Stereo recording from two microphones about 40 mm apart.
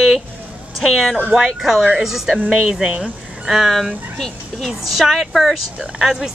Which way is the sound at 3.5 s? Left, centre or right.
Centre.